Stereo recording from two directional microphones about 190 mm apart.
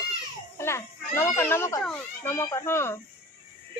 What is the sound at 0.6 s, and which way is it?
Speech, 15° left (ahead or behind).